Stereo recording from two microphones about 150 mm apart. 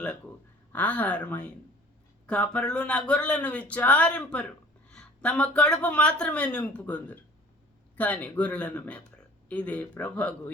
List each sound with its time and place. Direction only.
0.7 s speech: 10° left (ahead or behind)